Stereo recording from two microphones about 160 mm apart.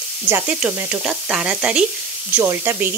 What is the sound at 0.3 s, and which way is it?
A woman's voice, 10° right (ahead or behind).